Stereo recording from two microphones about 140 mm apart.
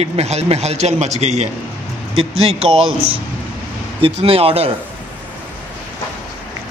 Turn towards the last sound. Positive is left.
turn(degrees=-45)  # may be behind; listen again after turning